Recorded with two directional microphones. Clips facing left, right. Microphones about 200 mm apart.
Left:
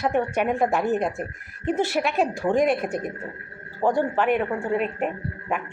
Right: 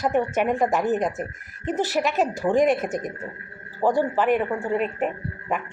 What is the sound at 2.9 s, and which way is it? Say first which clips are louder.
Speech: even; 40° right (ahead or behind).